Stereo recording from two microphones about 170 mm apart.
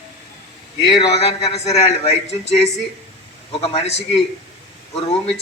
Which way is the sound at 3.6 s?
35° left (ahead or behind).